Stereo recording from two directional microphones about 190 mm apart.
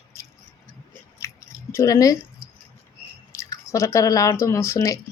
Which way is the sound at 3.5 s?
15° left (ahead or behind).